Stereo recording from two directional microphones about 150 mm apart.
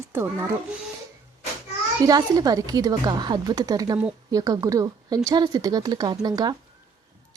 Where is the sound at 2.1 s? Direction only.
25° right (ahead or behind).